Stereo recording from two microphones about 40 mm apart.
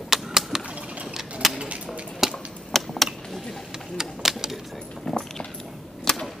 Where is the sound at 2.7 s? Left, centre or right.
Centre.